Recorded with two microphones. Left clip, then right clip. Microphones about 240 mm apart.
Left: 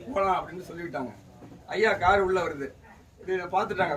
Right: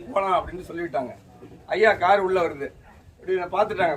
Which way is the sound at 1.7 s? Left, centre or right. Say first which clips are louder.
Right 4 dB; centre.